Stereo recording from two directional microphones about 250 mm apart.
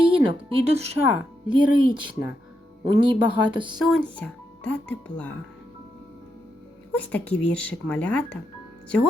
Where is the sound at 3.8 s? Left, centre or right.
Centre.